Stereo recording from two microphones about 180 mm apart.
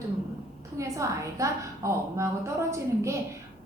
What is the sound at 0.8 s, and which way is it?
A woman's voice, 15° right (ahead or behind).